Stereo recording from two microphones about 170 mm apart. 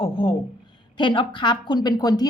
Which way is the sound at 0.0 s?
30° left (ahead or behind).